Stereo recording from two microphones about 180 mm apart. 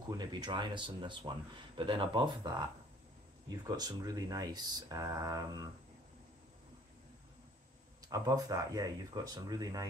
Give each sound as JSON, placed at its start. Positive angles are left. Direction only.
{"t": 0.2, "sound": "speech", "side_deg": -25}
{"t": 8.1, "sound": "speech", "side_deg": -20}